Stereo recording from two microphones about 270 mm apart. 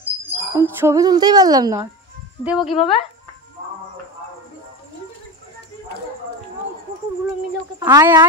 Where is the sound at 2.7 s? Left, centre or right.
Left.